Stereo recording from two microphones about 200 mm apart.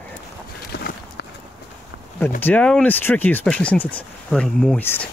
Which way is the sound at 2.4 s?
5° left (ahead or behind).